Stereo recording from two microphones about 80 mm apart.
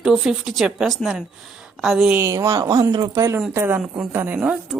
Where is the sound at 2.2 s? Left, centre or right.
Right.